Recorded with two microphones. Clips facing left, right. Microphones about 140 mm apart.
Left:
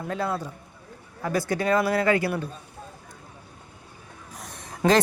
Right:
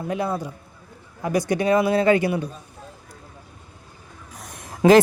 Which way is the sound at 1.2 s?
15° right (ahead or behind).